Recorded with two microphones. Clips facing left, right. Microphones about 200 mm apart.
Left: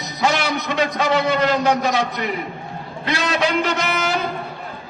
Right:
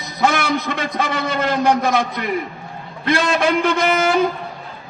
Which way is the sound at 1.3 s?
50° right (ahead or behind).